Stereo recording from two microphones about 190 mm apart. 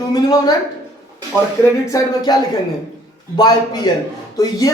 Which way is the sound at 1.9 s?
20° left (ahead or behind).